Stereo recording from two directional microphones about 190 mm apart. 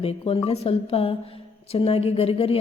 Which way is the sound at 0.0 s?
30° left (ahead or behind).